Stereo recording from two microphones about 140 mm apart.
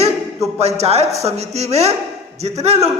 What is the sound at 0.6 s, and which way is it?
A man's voice, 50° right (ahead or behind).